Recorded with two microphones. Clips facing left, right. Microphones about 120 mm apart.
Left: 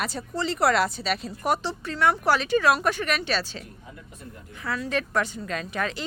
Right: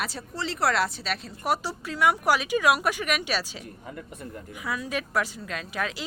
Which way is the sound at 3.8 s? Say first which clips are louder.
Right 5 dB; 55° right (ahead or behind).